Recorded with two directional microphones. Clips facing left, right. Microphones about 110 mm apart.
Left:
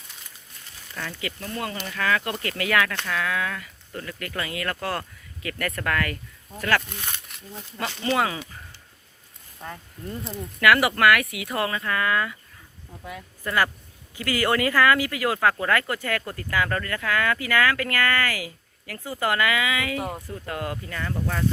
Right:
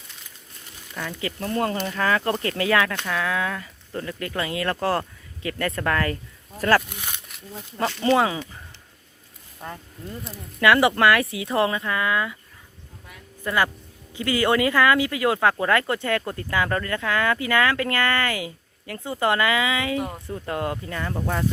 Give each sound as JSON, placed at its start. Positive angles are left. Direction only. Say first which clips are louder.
{"t": 1.2, "sound": "speech", "louder": "right 8 dB", "side_deg": -40}
{"t": 1.9, "sound": "speech", "louder": "right 3 dB", "side_deg": -30}
{"t": 6.8, "sound": "speech", "louder": "even", "side_deg": -10}
{"t": 8.0, "sound": "speech", "louder": "right 4 dB", "side_deg": -25}
{"t": 9.6, "sound": "speech", "louder": "right 1 dB", "side_deg": -10}
{"t": 10.6, "sound": "speech", "louder": "right 2 dB", "side_deg": -25}
{"t": 13.4, "sound": "speech", "louder": "right 1 dB", "side_deg": -20}
{"t": 20.0, "sound": "speech", "louder": "right 1 dB", "side_deg": 5}
{"t": 20.5, "sound": "speech", "louder": "right 4 dB", "side_deg": -25}